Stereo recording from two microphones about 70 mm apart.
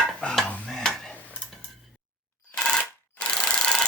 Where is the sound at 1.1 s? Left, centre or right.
Centre.